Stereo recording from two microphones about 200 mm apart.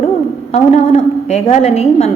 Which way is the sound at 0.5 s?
30° left (ahead or behind).